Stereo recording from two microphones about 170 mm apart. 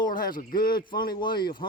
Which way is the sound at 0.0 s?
50° left (ahead or behind).